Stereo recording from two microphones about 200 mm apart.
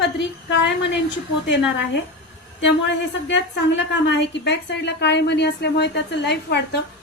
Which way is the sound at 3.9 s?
60° left (ahead or behind).